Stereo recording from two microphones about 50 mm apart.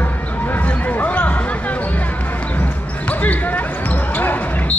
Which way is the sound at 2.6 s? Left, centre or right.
Left.